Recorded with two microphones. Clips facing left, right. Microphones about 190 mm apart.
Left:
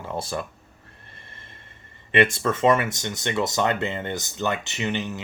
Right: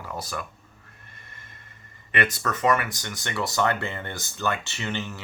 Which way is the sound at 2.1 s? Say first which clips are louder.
Left 6 dB; 25° left (ahead or behind).